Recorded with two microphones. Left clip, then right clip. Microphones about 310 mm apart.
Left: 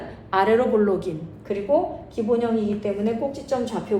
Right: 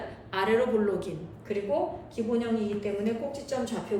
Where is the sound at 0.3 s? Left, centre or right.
Centre.